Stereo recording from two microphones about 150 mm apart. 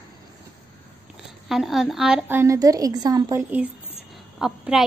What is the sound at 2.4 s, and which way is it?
A woman's voice, 20° right (ahead or behind).